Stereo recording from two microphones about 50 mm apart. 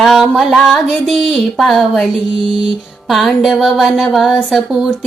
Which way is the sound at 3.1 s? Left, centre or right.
Centre.